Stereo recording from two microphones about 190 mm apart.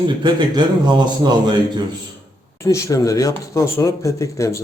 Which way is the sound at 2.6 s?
15° left (ahead or behind).